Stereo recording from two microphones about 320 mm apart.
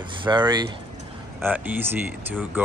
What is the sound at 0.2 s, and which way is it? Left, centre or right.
Speech, centre.